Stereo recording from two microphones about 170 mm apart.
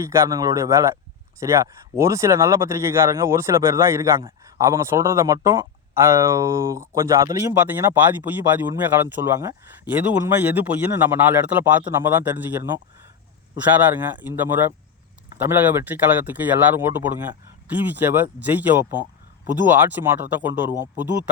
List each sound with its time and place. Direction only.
0.0 s speech: 15° right (ahead or behind)